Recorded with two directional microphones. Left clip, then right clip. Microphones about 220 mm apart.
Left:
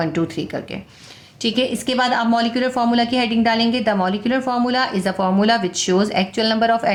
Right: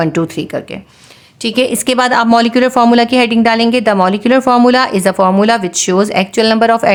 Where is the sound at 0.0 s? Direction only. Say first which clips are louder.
Right 7 dB; 40° right (ahead or behind).